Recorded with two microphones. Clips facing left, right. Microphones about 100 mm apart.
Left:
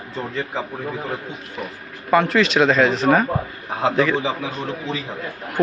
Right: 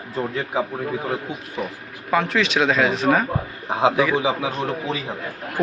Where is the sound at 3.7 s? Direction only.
15° right (ahead or behind).